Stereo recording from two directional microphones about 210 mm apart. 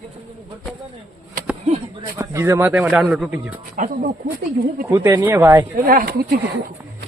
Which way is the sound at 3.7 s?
35° right (ahead or behind).